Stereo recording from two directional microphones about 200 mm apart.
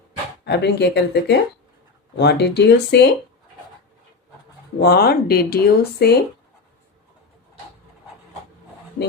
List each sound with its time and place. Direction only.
0.4 s speech: 55° left (ahead or behind)
4.8 s speech: 50° left (ahead or behind)